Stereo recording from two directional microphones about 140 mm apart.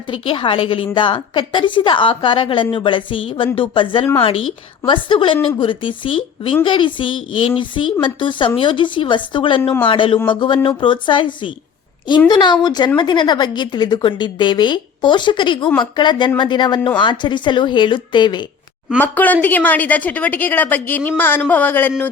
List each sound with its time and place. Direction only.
0.1 s a woman's voice: 40° left (ahead or behind)
18.9 s a woman's voice: 10° left (ahead or behind)